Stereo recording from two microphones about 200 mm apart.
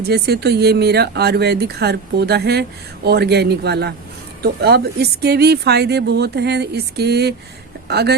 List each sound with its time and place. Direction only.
0.0 s speech: 55° right (ahead or behind)